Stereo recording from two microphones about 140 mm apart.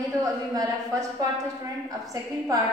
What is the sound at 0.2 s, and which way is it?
A woman's voice, 25° right (ahead or behind).